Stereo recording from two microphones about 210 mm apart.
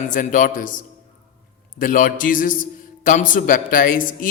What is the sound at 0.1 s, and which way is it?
Speech, 40° left (ahead or behind).